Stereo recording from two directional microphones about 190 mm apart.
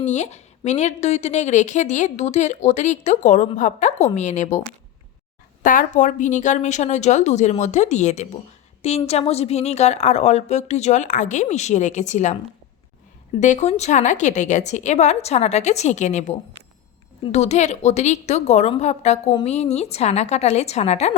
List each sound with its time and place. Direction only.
0.0 s a woman's voice: 35° left (ahead or behind)
5.6 s a woman's voice: 45° left (ahead or behind)
13.4 s a woman's voice: 40° left (ahead or behind)
17.3 s a woman's voice: 35° left (ahead or behind)